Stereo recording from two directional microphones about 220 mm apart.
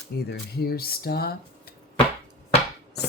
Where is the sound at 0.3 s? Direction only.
45° left (ahead or behind).